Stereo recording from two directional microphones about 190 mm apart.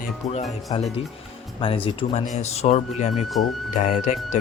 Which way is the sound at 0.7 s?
30° left (ahead or behind).